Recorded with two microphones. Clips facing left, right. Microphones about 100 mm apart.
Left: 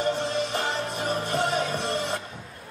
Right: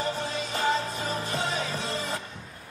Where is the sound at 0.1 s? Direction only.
60° left (ahead or behind).